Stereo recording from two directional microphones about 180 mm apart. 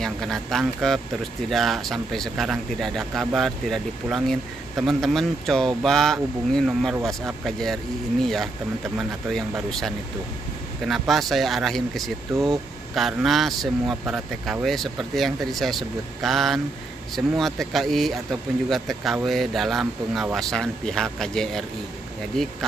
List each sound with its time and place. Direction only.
0.0 s speech: centre (ahead or behind)
9.7 s speech: centre (ahead or behind)